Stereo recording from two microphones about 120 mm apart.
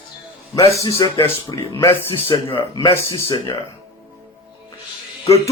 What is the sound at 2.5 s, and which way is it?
Speech, 40° left (ahead or behind).